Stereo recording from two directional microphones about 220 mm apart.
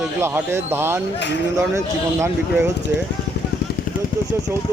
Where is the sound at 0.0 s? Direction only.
10° right (ahead or behind).